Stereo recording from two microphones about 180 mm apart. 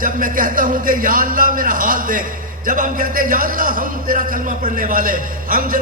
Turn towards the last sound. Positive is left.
turn(degrees=-50)  # may be behind; listen again after turning